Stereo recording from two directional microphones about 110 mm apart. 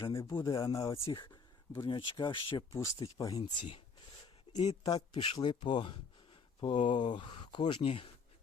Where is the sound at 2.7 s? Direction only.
25° left (ahead or behind).